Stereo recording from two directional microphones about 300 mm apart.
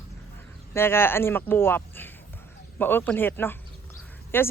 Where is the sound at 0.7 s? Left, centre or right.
Centre.